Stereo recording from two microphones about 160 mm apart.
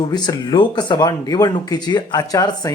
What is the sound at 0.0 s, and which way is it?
A man's voice, 25° left (ahead or behind).